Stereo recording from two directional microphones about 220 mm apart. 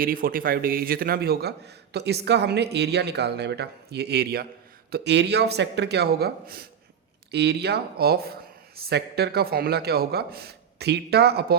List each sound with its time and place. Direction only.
0.0 s a man's voice: 40° right (ahead or behind)